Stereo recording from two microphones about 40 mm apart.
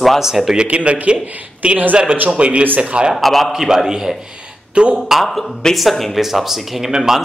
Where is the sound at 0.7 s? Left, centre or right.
Right.